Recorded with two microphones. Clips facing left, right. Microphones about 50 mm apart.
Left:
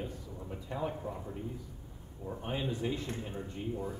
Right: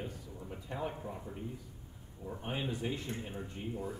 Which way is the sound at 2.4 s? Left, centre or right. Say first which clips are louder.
Left 2 dB; centre.